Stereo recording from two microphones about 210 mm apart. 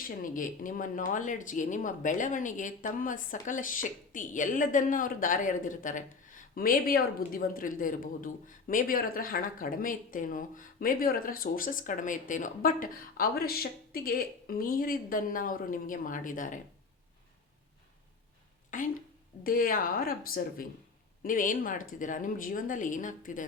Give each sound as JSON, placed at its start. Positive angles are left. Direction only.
{"t": 0.1, "sound": "speech", "side_deg": 40}
{"t": 18.7, "sound": "a woman's voice", "side_deg": 40}